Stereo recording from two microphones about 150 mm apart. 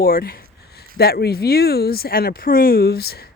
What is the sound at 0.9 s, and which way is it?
A woman's voice, 90° left.